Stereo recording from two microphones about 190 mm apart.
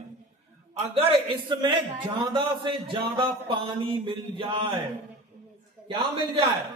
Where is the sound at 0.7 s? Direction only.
30° right (ahead or behind).